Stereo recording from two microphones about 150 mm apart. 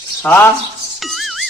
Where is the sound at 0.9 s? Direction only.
Centre (ahead or behind).